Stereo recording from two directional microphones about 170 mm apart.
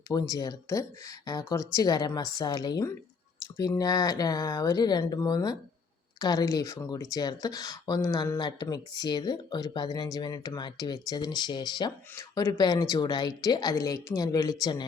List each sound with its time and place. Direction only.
0.1 s speech: 20° left (ahead or behind)